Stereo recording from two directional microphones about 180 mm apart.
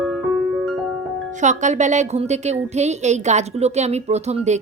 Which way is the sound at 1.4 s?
40° right (ahead or behind).